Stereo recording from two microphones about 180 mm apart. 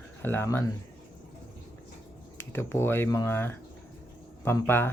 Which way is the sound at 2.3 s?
15° left (ahead or behind).